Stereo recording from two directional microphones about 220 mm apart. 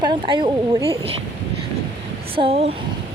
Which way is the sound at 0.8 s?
15° left (ahead or behind).